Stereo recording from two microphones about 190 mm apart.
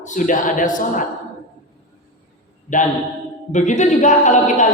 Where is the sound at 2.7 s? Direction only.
40° left (ahead or behind).